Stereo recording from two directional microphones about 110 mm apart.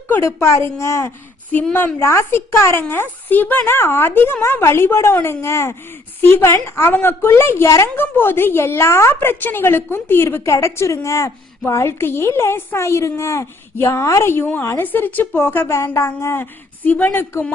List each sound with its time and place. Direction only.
0.1 s a woman's voice: 25° left (ahead or behind)